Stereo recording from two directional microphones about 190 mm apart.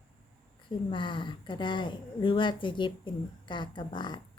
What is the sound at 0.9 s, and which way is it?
Speech, 25° left (ahead or behind).